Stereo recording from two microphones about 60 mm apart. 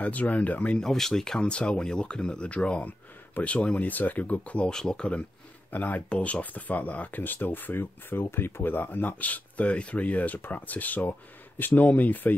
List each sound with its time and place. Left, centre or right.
0.0 s speech: left
0.7 s speech: centre
5.7 s speech: left